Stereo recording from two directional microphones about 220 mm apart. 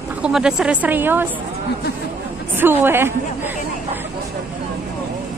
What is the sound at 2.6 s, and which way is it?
Speech, 10° right (ahead or behind).